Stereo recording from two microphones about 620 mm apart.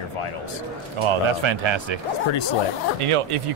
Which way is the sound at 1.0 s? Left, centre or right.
Right.